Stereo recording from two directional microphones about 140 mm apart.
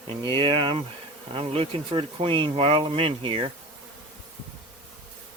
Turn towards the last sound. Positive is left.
turn(degrees=-40)  # may be behind; listen again after turning